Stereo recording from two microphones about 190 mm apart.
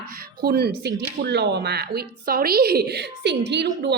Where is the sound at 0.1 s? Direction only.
50° right (ahead or behind).